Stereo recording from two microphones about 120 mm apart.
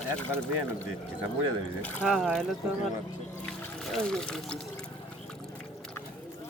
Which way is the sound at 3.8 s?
5° left (ahead or behind).